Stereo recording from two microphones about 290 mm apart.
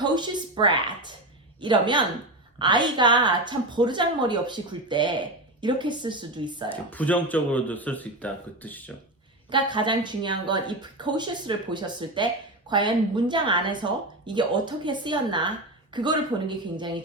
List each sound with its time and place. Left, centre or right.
0.0 s speech: centre
6.9 s speech: centre
9.5 s speech: centre